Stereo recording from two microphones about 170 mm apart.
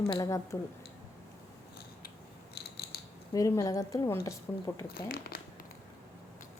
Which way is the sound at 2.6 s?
75° left (ahead or behind).